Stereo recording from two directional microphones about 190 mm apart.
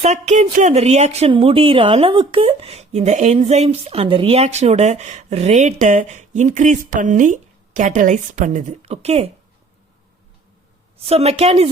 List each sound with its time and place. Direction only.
0.0 s speech: 35° right (ahead or behind)
11.0 s speech: 30° right (ahead or behind)